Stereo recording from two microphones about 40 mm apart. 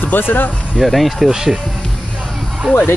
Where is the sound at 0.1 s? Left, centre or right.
Left.